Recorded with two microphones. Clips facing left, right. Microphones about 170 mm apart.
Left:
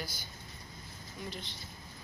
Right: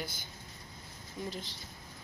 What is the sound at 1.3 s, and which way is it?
Speech, 40° right (ahead or behind).